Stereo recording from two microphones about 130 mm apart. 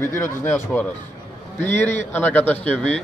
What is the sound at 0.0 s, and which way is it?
Speech, 20° left (ahead or behind).